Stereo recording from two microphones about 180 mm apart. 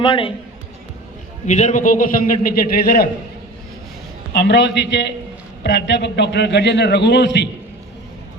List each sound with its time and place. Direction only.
0.0 s a man's voice: 30° left (ahead or behind)
1.5 s a man's voice: 45° left (ahead or behind); by 3.1 s 60° left (ahead or behind)
4.3 s a man's voice: 70° left (ahead or behind)